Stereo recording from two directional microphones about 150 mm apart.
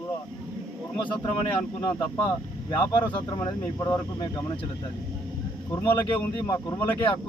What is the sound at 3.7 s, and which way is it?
Speech, 15° left (ahead or behind).